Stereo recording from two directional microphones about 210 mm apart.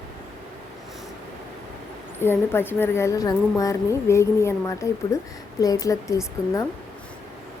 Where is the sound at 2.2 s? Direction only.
10° left (ahead or behind).